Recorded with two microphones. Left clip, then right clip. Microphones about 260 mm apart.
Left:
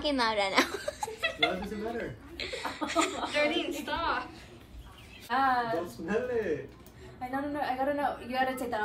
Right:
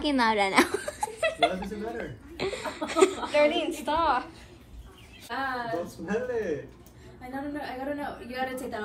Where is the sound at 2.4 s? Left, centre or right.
Centre.